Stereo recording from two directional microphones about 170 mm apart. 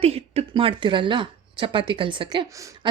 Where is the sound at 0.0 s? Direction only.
35° right (ahead or behind).